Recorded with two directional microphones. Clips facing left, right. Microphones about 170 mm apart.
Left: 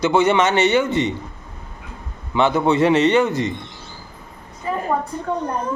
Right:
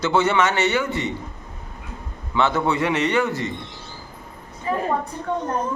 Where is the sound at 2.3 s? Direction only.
15° left (ahead or behind).